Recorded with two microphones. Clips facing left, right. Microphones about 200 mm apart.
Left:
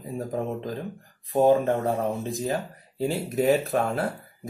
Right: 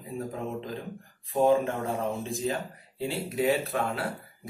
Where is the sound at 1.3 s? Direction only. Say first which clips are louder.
Left 4 dB; 40° left (ahead or behind).